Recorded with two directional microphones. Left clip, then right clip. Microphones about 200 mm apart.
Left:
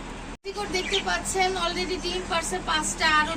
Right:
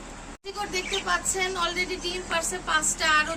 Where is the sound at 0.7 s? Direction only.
35° right (ahead or behind).